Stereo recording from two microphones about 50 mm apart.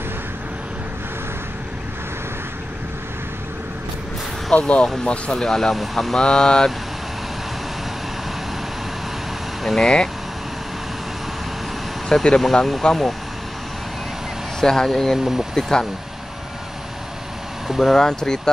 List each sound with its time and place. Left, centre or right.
4.6 s speech: left; by 6.1 s centre
6.1 s speech: centre
9.8 s speech: centre
12.1 s speech: centre
14.6 s speech: centre
15.1 s speech: centre
15.5 s speech: centre
17.6 s a sound: centre
17.9 s speech: centre